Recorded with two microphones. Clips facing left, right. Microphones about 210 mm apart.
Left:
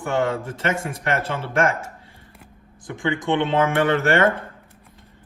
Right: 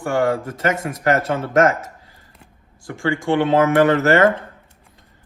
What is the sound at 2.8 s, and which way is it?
Speech, 20° left (ahead or behind).